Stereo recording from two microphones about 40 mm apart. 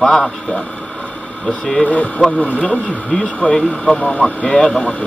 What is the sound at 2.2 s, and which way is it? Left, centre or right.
Speech, left.